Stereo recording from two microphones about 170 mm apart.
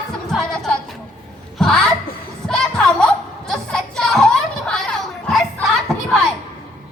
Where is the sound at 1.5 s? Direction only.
Centre (ahead or behind).